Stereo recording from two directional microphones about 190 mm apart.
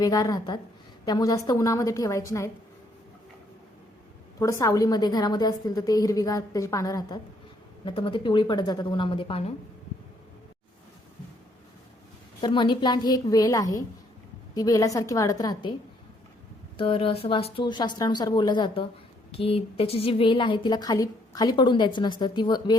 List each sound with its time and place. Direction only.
0.0 s a woman's voice: 20° left (ahead or behind)
4.4 s a woman's voice: 15° left (ahead or behind)
12.4 s a woman's voice: 25° left (ahead or behind)
16.7 s a woman's voice: 30° left (ahead or behind)